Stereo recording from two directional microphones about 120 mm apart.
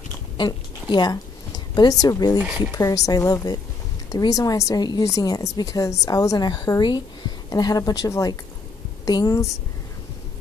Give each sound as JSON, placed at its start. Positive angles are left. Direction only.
{"t": 0.4, "sound": "a woman's voice", "side_deg": 40}